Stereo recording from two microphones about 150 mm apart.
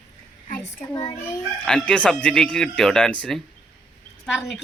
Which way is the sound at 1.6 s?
5° left (ahead or behind).